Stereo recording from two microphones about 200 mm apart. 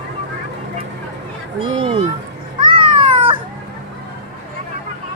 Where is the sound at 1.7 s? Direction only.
30° right (ahead or behind).